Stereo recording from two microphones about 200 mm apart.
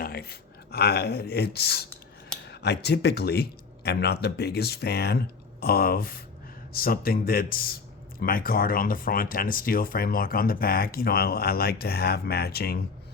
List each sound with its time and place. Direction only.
0.0 s speech: 50° left (ahead or behind)